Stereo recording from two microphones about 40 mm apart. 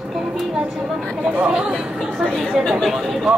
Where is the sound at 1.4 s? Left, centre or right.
Right.